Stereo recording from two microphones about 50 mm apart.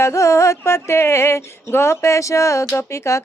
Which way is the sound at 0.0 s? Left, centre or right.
Left.